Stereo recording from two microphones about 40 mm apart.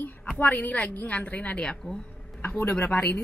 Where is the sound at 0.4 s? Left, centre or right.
Left.